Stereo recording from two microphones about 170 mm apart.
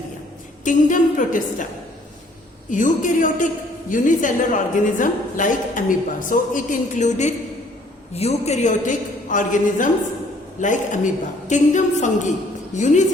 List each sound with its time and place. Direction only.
0.6 s a woman's voice: 50° left (ahead or behind)
2.6 s a woman's voice: 50° left (ahead or behind)